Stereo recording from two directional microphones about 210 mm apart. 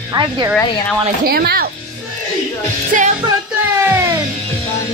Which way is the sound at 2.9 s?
40° right (ahead or behind).